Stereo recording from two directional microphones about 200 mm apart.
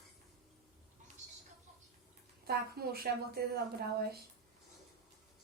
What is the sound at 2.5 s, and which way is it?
A woman's voice, 50° right (ahead or behind).